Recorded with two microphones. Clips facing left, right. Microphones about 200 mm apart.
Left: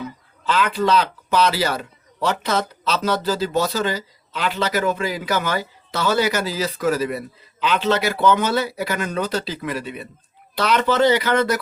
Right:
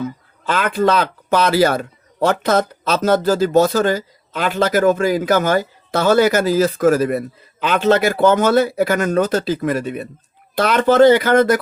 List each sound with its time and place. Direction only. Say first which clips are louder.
0.0 s speech: right 5 dB; 50° right (ahead or behind)